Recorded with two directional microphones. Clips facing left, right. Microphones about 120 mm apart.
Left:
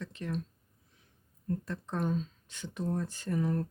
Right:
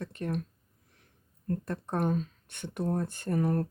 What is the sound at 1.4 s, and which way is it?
Speech, 55° right (ahead or behind).